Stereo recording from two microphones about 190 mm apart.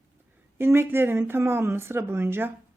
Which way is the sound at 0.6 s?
10° right (ahead or behind).